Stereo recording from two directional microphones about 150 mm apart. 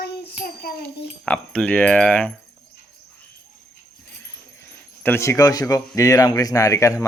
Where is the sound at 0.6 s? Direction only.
90° left.